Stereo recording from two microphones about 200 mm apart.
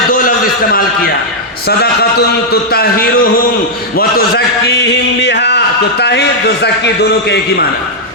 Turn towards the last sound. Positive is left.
turn(degrees=55)  # may be behind; listen again after turning